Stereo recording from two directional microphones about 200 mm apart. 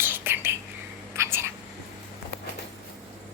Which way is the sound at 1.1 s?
15° right (ahead or behind).